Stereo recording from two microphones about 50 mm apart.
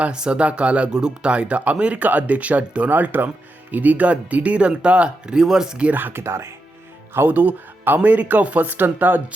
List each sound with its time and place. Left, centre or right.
0.0 s speech: right
2.9 s speech: right; by 5.9 s centre
5.9 s speech: right
6.2 s speech: right
7.3 s speech: right